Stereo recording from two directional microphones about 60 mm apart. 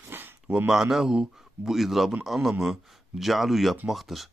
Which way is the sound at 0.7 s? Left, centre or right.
Centre.